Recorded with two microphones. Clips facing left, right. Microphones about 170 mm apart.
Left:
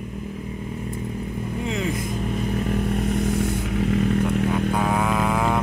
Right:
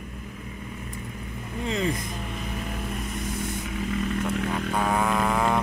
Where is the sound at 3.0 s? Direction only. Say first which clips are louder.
Left 9 dB; 55° left (ahead or behind).